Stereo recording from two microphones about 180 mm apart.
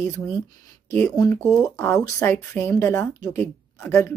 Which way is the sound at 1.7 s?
15° left (ahead or behind).